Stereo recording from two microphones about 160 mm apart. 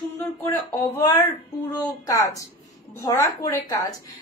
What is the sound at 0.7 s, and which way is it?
A woman's voice, 20° left (ahead or behind).